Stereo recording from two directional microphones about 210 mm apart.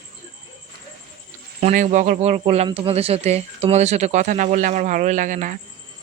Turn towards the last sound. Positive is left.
turn(degrees=-40)  # may be behind; listen again after turning